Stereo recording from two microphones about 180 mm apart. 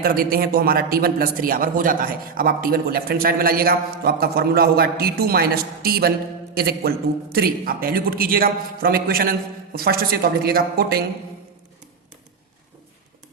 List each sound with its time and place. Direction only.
0.0 s a man's voice: 55° right (ahead or behind)